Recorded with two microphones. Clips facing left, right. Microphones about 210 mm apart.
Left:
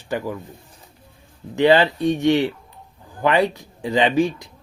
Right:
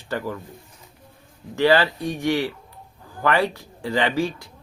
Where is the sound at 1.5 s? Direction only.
20° left (ahead or behind).